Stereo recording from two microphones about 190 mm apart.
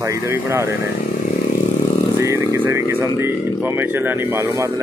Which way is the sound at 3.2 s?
10° right (ahead or behind).